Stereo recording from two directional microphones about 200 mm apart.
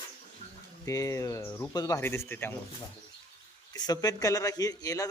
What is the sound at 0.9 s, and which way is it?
Speech, 15° left (ahead or behind).